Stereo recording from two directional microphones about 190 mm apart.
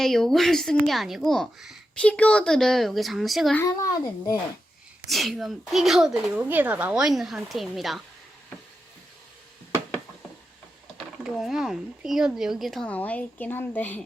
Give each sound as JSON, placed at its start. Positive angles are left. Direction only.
{"t": 0.0, "sound": "speech", "side_deg": 0}
{"t": 3.6, "sound": "a child's voice", "side_deg": 15}
{"t": 5.0, "sound": "speech", "side_deg": 0}
{"t": 11.2, "sound": "speech", "side_deg": 0}